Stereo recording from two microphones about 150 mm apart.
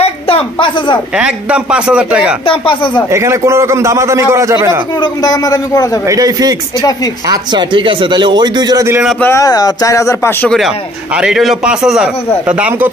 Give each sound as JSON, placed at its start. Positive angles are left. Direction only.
{"t": 0.0, "sound": "a sound", "side_deg": 35}
{"t": 1.1, "sound": "a man's voice", "side_deg": -5}
{"t": 2.4, "sound": "speech", "side_deg": 35}
{"t": 3.1, "sound": "a man's voice", "side_deg": -20}
{"t": 5.0, "sound": "speech", "side_deg": 25}
{"t": 6.0, "sound": "a man's voice", "side_deg": -25}
{"t": 9.2, "sound": "speech", "side_deg": 20}
{"t": 11.1, "sound": "a man's voice", "side_deg": -5}